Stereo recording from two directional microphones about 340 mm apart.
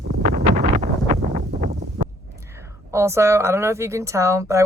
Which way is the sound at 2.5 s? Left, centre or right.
Centre.